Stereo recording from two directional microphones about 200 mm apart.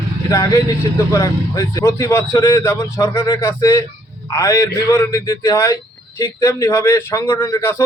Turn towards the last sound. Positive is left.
turn(degrees=15)  # may be behind; listen again after turning